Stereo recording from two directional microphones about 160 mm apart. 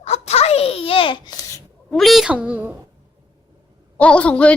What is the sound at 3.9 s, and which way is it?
Speech, 10° left (ahead or behind).